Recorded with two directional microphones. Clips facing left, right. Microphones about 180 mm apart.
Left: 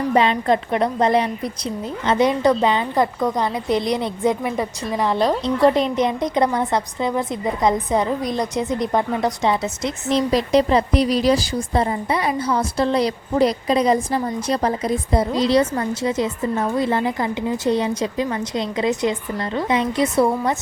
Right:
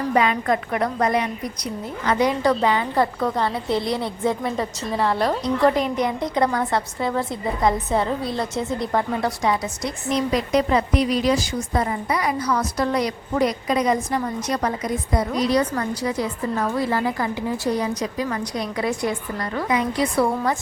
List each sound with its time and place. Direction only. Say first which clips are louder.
0.1 s a woman's voice: left 3 dB; 25° left (ahead or behind)